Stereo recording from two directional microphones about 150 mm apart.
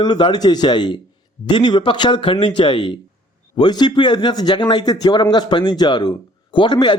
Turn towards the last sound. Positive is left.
turn(degrees=30)  # may be behind; listen again after turning